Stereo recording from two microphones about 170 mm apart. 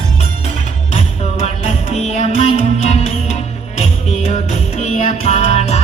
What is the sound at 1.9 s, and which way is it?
Music, 40° left (ahead or behind).